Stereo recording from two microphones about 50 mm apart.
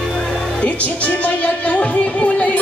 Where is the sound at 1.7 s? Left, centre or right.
Left.